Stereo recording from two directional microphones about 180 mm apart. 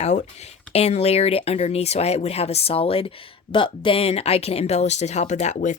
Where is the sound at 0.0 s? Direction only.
40° left (ahead or behind).